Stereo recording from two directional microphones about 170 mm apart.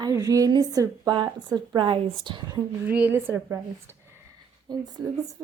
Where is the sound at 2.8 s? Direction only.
10° right (ahead or behind).